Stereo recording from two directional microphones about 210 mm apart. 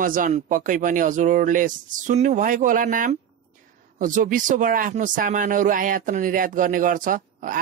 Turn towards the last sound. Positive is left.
turn(degrees=-40)  # may be behind; listen again after turning